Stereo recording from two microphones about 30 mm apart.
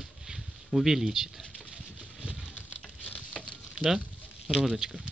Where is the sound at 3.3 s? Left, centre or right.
Centre.